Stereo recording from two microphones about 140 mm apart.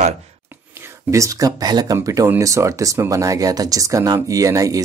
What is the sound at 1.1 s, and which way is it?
Speech, 25° right (ahead or behind).